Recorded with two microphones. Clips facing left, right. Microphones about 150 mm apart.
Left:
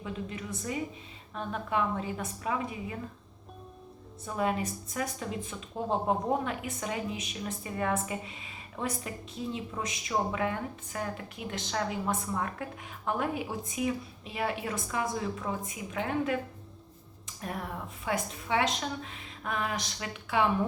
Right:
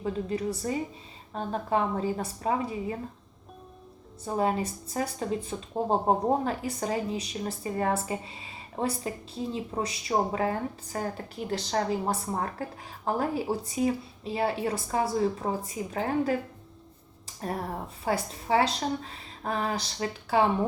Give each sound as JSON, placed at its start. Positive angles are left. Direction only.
{"t": 0.0, "sound": "speech", "side_deg": -35}
{"t": 4.3, "sound": "speech", "side_deg": -30}